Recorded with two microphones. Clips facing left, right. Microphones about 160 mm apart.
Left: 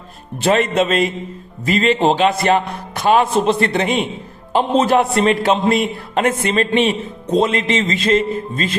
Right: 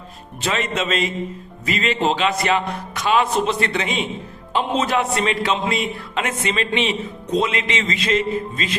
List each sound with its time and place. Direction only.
0.4 s a man's voice: 55° left (ahead or behind)
1.6 s music: 40° left (ahead or behind)
2.5 s a man's voice: 50° left (ahead or behind)
4.5 s a man's voice: 35° left (ahead or behind)
7.3 s music: 45° left (ahead or behind)
8.0 s a man's voice: 50° left (ahead or behind)